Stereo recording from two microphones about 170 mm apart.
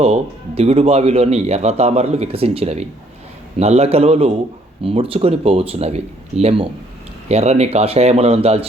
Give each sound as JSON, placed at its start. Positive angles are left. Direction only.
{"t": 0.0, "sound": "speech", "side_deg": -35}